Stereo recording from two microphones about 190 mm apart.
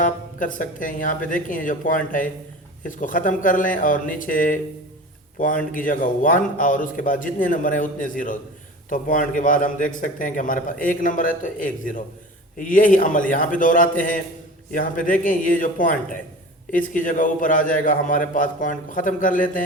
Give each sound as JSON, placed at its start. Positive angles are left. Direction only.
{"t": 0.0, "sound": "a man's voice", "side_deg": 45}